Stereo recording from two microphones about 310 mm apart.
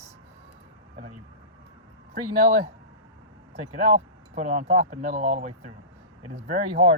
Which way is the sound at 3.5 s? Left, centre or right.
Right.